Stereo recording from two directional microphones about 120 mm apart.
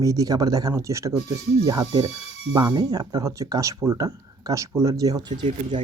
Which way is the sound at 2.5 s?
30° right (ahead or behind).